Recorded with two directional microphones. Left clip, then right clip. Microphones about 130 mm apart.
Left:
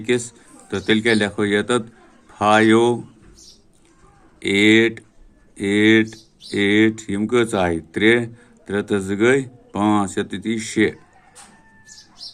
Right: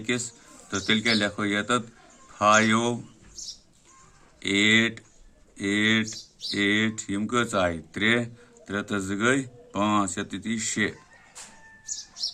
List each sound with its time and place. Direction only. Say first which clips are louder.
0.0 s speech: left 8 dB; 40° left (ahead or behind)
4.4 s speech: left 6 dB; 35° left (ahead or behind)